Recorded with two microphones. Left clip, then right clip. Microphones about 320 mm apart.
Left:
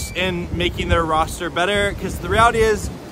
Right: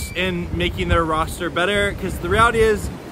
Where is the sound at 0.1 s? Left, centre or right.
Centre.